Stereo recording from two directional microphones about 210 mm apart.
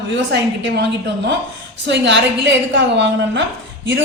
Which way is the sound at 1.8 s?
55° right (ahead or behind).